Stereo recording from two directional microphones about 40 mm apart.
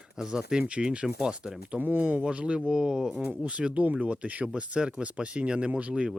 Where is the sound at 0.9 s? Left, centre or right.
Right.